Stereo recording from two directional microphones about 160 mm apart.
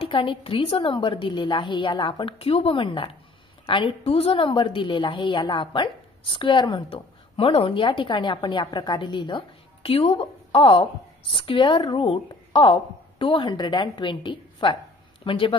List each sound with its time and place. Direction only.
0.0 s a woman's voice: 35° left (ahead or behind)